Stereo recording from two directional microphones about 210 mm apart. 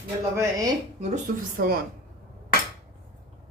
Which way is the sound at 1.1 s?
45° right (ahead or behind).